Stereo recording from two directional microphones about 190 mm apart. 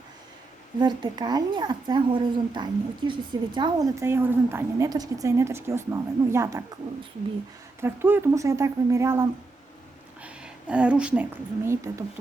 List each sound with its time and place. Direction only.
0.8 s speech: 25° right (ahead or behind)
7.8 s speech: 10° right (ahead or behind)
10.2 s a woman's voice: 5° right (ahead or behind)